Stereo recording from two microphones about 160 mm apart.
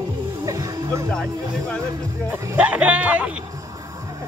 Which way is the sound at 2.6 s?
10° right (ahead or behind).